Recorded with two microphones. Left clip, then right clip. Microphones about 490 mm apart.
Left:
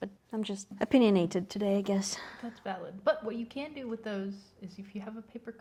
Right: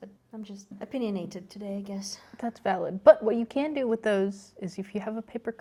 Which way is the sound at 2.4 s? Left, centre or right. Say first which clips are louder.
Right 12 dB; right.